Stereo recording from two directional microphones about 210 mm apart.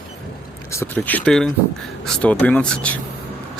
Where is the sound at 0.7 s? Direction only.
10° left (ahead or behind).